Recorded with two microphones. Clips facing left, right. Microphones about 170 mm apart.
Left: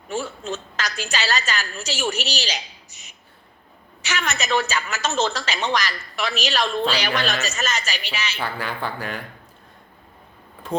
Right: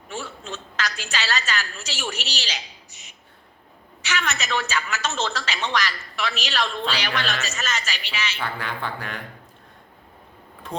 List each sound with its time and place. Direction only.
0.1 s a woman's voice: 45° left (ahead or behind)
8.4 s speech: 5° left (ahead or behind)